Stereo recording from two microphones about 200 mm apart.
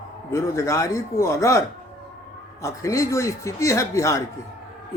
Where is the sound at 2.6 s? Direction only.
15° left (ahead or behind).